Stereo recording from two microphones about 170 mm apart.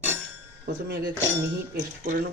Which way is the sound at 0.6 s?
75° right (ahead or behind).